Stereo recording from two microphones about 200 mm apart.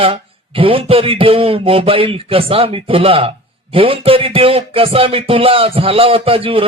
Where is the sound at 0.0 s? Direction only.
25° right (ahead or behind).